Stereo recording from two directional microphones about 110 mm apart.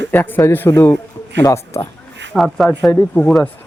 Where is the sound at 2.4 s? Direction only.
Centre (ahead or behind).